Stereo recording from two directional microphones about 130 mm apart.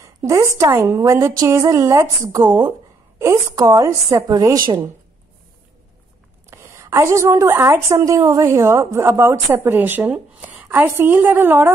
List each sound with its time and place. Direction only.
0.0 s a sound: 20° right (ahead or behind)
0.6 s a woman's voice: 20° right (ahead or behind)
6.5 s a woman's voice: 20° right (ahead or behind)